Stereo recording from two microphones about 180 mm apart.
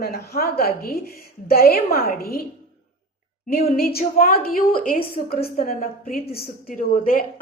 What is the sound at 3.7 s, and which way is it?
A woman's voice, 55° left (ahead or behind).